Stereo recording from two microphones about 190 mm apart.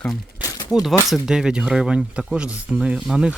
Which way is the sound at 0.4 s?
20° left (ahead or behind).